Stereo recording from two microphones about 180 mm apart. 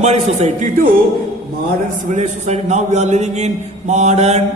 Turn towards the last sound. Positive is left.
turn(degrees=-40)  # may be behind; listen again after turning